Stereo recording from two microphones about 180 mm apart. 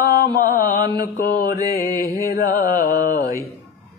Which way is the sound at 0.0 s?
55° left (ahead or behind).